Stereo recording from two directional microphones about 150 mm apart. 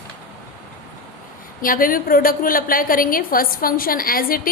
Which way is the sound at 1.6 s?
70° left (ahead or behind).